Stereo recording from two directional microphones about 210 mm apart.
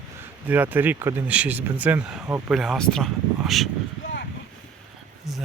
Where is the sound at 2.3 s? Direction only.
15° right (ahead or behind).